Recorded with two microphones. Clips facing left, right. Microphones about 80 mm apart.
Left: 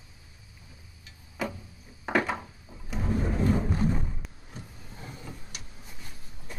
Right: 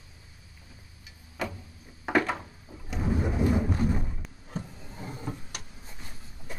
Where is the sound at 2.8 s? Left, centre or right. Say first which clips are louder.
Right 1 dB; centre.